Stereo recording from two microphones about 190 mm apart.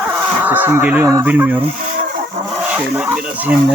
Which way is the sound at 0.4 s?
10° right (ahead or behind).